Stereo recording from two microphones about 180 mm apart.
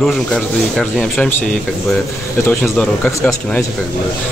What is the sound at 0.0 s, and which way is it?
Speech, centre (ahead or behind).